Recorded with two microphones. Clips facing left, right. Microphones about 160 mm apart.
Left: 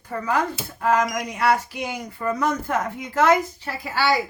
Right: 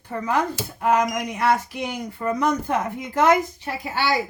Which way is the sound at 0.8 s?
15° right (ahead or behind).